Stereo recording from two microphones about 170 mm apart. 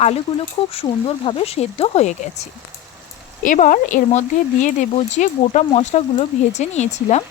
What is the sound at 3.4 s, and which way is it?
Speech, 50° left (ahead or behind).